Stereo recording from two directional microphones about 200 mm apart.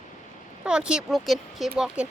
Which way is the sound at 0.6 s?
5° right (ahead or behind).